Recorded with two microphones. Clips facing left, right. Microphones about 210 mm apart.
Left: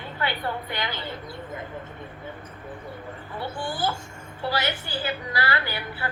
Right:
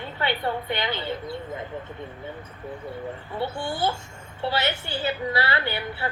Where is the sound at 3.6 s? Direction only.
25° right (ahead or behind).